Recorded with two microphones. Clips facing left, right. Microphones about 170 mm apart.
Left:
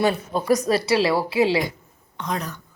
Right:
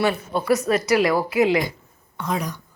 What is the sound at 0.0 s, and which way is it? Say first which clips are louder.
A woman's voice: even; 40° left (ahead or behind).